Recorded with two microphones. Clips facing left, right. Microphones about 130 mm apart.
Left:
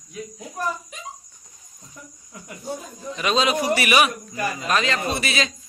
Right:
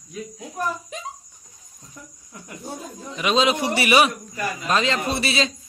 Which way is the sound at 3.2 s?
20° right (ahead or behind).